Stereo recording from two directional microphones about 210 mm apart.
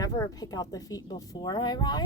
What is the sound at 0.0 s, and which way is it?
A woman's voice, 15° left (ahead or behind).